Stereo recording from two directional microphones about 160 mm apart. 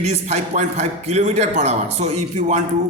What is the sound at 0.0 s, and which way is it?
A man's voice, 45° right (ahead or behind).